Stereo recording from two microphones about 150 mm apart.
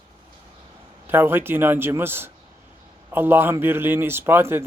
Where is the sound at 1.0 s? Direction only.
15° right (ahead or behind).